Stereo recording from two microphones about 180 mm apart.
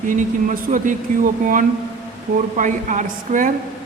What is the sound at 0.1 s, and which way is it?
Speech, 45° right (ahead or behind).